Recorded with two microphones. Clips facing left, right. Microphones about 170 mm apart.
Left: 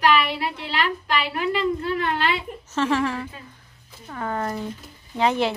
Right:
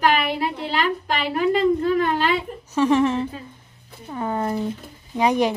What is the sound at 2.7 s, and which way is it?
A woman's voice, 20° right (ahead or behind).